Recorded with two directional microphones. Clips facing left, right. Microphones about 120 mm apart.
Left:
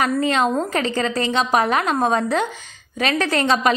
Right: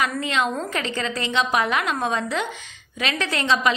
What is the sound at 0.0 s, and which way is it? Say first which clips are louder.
A woman's voice: left 5 dB; 40° left (ahead or behind).